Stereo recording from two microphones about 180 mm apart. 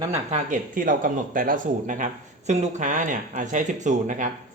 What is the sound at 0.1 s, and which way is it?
Speech, 40° right (ahead or behind).